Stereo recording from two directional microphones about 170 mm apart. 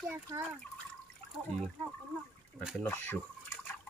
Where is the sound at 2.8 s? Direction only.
10° left (ahead or behind).